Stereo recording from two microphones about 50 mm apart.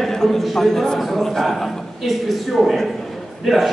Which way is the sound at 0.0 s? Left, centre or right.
Centre.